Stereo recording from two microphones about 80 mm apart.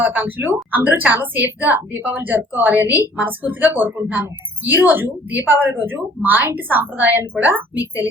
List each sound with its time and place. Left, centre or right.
0.0 s a woman's voice: right